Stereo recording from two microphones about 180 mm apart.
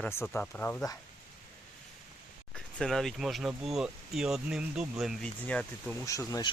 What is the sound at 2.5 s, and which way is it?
Speech, 5° left (ahead or behind).